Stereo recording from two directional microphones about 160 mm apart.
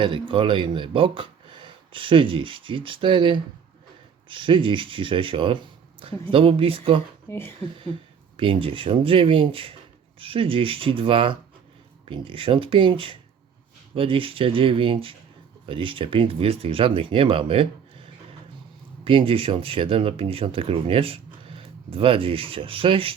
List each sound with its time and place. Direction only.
0.0 s speech: 30° right (ahead or behind)
7.3 s speech: 15° left (ahead or behind)
8.4 s speech: 35° right (ahead or behind)